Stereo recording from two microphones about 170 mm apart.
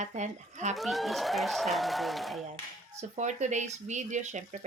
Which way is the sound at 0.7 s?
Centre (ahead or behind).